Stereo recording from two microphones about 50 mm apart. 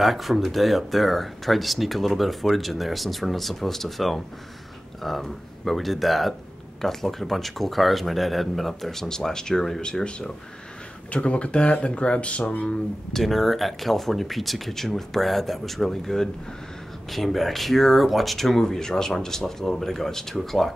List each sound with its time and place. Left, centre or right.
0.0 s speech: centre; by 12.7 s left
13.1 s speech: centre